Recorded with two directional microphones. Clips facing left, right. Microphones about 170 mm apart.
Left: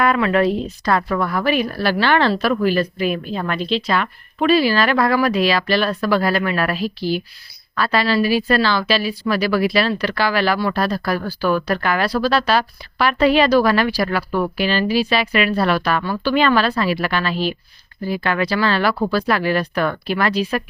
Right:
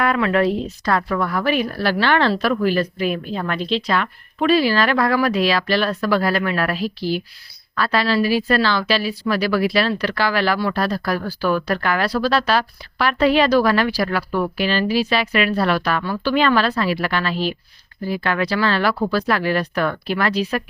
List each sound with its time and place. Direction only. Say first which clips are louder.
0.0 s speech: left 1 dB; 20° left (ahead or behind)